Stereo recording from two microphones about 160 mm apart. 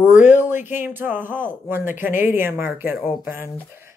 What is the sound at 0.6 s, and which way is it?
Speech, 15° right (ahead or behind).